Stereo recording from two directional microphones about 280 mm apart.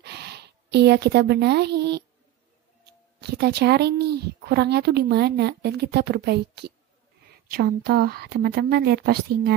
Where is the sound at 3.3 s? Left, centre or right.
Right.